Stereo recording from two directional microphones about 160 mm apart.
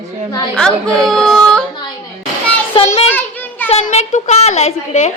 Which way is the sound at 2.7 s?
40° left (ahead or behind).